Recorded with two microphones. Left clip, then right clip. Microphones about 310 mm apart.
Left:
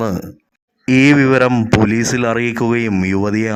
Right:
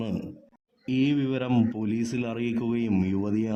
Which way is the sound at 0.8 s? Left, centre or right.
Left.